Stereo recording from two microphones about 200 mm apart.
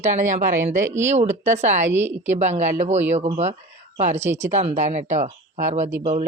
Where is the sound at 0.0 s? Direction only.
35° right (ahead or behind).